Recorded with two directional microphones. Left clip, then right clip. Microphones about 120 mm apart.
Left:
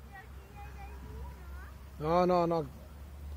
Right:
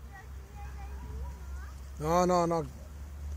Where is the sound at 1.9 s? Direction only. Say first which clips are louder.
Right 1 dB; 25° right (ahead or behind).